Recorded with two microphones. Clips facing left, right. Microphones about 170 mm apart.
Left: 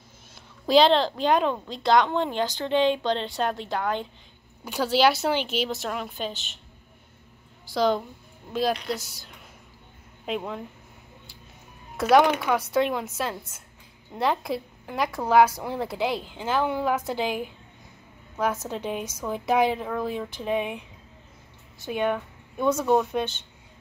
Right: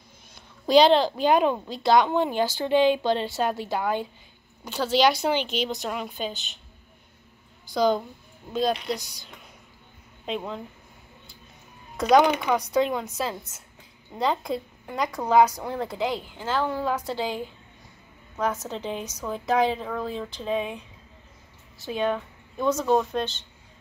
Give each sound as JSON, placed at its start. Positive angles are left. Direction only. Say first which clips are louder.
{"t": 0.7, "sound": "speech", "louder": "right 1 dB", "side_deg": 0}
{"t": 4.6, "sound": "speech", "louder": "even", "side_deg": 10}
{"t": 7.6, "sound": "speech", "louder": "right 1 dB", "side_deg": 0}
{"t": 12.0, "sound": "speech", "louder": "even", "side_deg": 5}
{"t": 18.3, "sound": "speech", "louder": "left 1 dB", "side_deg": 5}